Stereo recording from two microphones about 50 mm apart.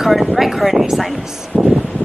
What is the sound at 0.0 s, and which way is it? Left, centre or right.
Speech, centre.